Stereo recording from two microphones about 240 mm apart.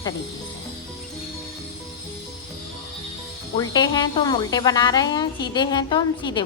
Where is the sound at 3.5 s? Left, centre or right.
Centre.